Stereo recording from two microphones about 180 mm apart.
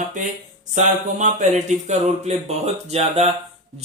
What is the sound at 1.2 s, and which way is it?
A man's voice, 45° right (ahead or behind).